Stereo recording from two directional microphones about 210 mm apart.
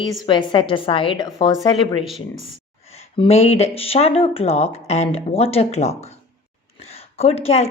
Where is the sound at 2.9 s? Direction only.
30° left (ahead or behind).